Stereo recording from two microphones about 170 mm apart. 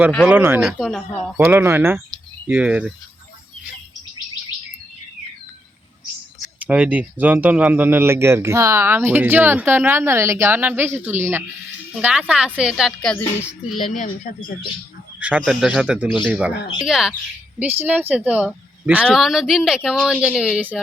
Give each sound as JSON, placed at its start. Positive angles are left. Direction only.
{"t": 0.3, "sound": "speech", "side_deg": -10}
{"t": 0.8, "sound": "speech", "side_deg": 0}
{"t": 1.4, "sound": "speech", "side_deg": -15}
{"t": 6.6, "sound": "speech", "side_deg": -10}
{"t": 13.9, "sound": "speech", "side_deg": 50}
{"t": 15.2, "sound": "speech", "side_deg": -5}